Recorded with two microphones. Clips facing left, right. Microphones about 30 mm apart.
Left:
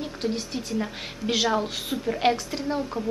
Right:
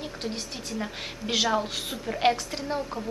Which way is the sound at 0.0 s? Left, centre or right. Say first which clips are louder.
Left 5 dB; centre.